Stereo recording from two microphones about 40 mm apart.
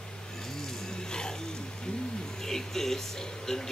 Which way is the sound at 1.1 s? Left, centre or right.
Centre.